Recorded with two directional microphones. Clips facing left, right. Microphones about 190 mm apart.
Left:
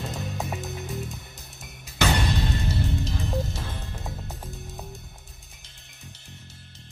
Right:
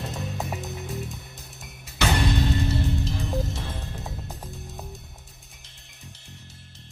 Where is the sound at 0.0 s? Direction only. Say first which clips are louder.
Even; centre (ahead or behind).